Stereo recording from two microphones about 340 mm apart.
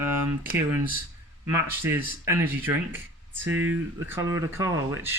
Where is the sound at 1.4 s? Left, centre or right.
Centre.